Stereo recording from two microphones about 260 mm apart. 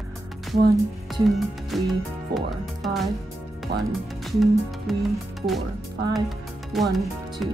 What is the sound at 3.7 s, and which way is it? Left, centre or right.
Speech, right.